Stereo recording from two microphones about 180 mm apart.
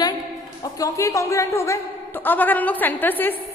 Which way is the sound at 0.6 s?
20° left (ahead or behind).